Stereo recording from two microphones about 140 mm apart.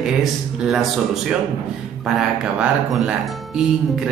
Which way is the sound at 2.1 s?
5° right (ahead or behind).